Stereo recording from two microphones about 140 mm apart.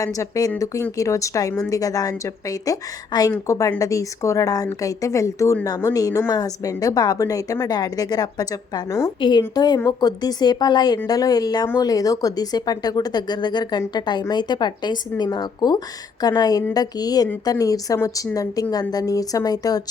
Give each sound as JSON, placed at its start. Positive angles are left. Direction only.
{"t": 0.0, "sound": "a woman's voice", "side_deg": 25}